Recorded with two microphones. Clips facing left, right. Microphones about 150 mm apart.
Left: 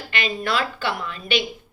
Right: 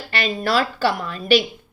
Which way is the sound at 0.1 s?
35° right (ahead or behind).